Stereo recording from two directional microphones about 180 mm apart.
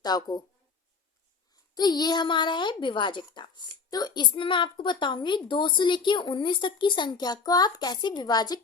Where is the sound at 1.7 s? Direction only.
20° left (ahead or behind).